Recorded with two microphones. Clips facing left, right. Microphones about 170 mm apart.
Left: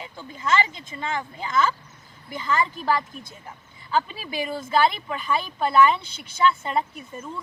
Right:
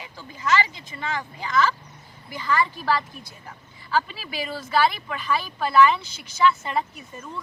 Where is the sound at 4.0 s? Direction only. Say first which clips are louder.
Left 3 dB; 20° left (ahead or behind).